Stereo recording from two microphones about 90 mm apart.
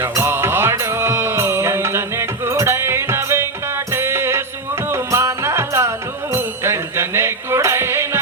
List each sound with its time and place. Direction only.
0.0 s music: 30° right (ahead or behind)